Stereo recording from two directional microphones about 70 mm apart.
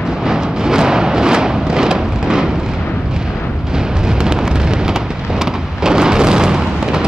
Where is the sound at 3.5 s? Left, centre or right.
Centre.